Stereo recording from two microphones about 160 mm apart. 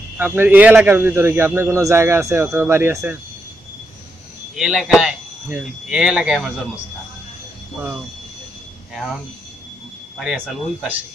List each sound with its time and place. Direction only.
0.2 s a man's voice: 10° right (ahead or behind)
4.6 s speech: 5° right (ahead or behind)
10.1 s speech: centre (ahead or behind)